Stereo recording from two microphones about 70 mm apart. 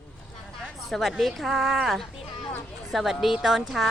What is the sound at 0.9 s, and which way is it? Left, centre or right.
A woman's voice, centre.